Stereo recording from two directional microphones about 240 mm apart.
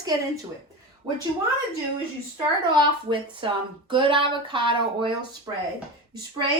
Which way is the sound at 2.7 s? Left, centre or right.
Right.